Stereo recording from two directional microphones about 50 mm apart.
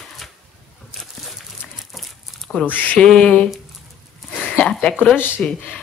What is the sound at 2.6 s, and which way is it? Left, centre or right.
Speech, left.